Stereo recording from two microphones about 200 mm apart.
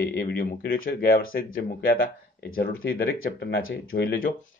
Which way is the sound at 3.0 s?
65° left (ahead or behind).